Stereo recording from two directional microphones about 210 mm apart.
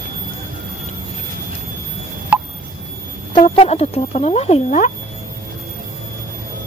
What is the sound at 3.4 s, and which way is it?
Speech, 30° left (ahead or behind).